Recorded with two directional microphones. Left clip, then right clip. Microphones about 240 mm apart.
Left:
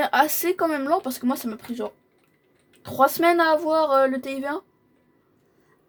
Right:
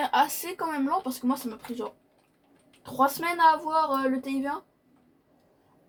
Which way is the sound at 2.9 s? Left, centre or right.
Left.